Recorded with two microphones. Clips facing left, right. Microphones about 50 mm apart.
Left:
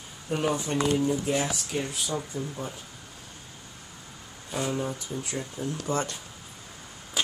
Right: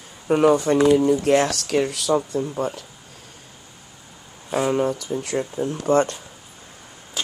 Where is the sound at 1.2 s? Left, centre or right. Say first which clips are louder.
Right 10 dB; right.